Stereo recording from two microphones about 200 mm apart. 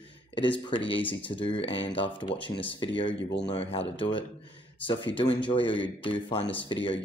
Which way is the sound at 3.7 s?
25° left (ahead or behind).